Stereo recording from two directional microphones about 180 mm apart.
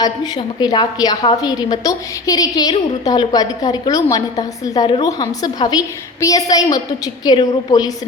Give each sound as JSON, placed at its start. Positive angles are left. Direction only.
{"t": 0.0, "sound": "a woman's voice", "side_deg": 25}